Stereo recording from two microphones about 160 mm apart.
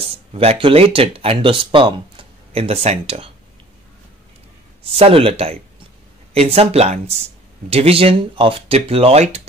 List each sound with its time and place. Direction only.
0.0 s speech: 40° right (ahead or behind)
4.8 s speech: 35° right (ahead or behind)